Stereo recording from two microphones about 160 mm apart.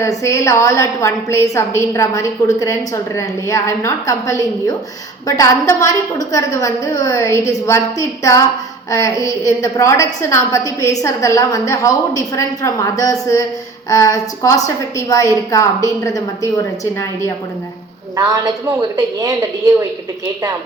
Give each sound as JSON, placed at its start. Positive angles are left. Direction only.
{"t": 0.0, "sound": "a woman's voice", "side_deg": 20}
{"t": 18.2, "sound": "a woman's voice", "side_deg": -20}